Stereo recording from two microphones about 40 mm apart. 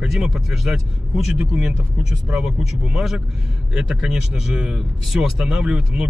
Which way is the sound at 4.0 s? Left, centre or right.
Centre.